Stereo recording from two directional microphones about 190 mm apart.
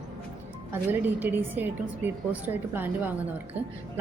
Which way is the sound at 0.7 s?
10° right (ahead or behind).